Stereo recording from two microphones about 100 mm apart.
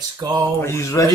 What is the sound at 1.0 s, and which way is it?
Speech, 35° left (ahead or behind).